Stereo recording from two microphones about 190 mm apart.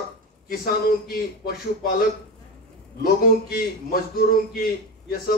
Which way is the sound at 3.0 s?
50° left (ahead or behind).